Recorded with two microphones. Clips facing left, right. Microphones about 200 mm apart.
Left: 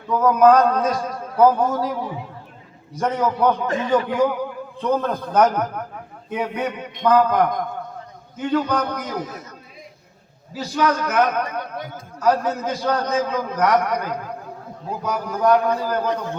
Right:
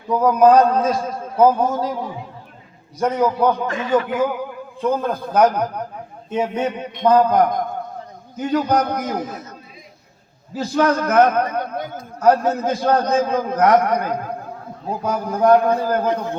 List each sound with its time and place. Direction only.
0.1 s a man's voice: 10° right (ahead or behind)
0.4 s a sound: 30° right (ahead or behind)
2.9 s a man's voice: 10° right (ahead or behind)
3.7 s a man's voice: 30° left (ahead or behind)
4.8 s a man's voice: 10° right (ahead or behind)
6.3 s a man's voice: 25° right (ahead or behind); by 16.1 s 50° right (ahead or behind)